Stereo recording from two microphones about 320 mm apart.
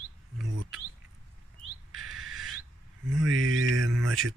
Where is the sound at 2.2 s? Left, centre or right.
Right.